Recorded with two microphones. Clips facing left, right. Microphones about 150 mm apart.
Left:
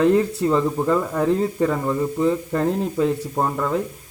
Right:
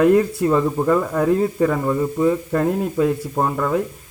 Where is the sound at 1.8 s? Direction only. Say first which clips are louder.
Right 2 dB; 5° right (ahead or behind).